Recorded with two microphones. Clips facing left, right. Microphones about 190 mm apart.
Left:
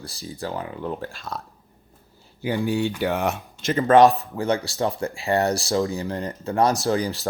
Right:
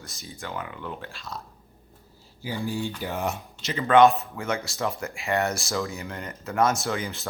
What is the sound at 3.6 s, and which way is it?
Speech, 50° left (ahead or behind).